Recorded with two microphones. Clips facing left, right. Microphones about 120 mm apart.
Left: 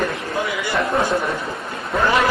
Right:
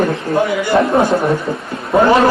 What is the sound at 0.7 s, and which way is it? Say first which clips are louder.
Speech: right 7 dB; 55° right (ahead or behind).